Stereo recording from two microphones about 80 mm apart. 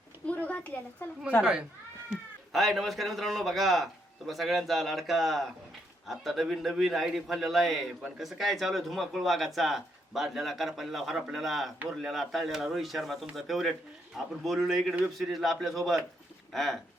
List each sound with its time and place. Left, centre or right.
0.3 s a sound: centre
1.0 s a woman's voice: left
1.4 s speech: centre
2.5 s a man's voice: centre